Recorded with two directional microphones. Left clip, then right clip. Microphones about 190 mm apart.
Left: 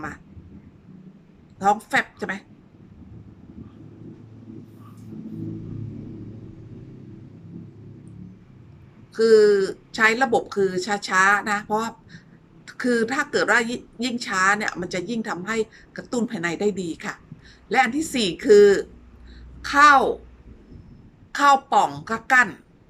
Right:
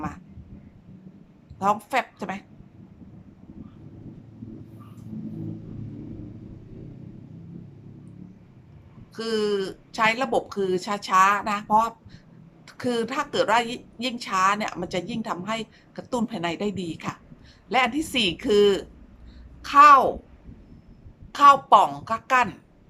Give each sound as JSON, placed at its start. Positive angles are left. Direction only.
{"t": 1.5, "sound": "a woman's voice", "side_deg": -15}
{"t": 9.1, "sound": "a woman's voice", "side_deg": -10}
{"t": 21.3, "sound": "a woman's voice", "side_deg": -15}